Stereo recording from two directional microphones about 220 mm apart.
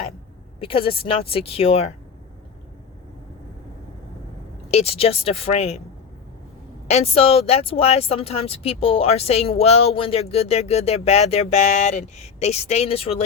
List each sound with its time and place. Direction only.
0.6 s speech: 25° left (ahead or behind)
4.7 s speech: 30° left (ahead or behind)
6.8 s speech: 30° left (ahead or behind)